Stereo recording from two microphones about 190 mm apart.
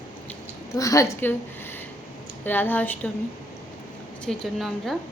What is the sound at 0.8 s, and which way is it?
Speech, 15° left (ahead or behind).